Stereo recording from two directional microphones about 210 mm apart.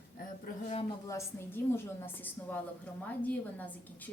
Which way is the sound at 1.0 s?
15° left (ahead or behind).